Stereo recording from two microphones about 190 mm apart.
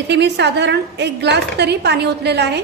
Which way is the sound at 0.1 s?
65° right (ahead or behind).